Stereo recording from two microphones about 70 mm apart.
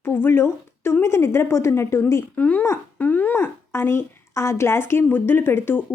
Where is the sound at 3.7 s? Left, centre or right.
Left.